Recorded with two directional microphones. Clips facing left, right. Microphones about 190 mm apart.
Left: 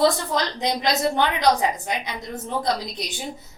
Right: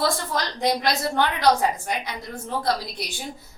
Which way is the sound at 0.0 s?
20° left (ahead or behind).